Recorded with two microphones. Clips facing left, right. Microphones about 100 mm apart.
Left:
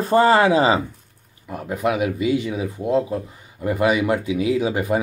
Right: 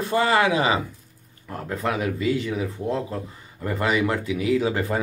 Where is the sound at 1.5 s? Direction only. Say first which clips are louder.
Left 4 dB; 15° left (ahead or behind).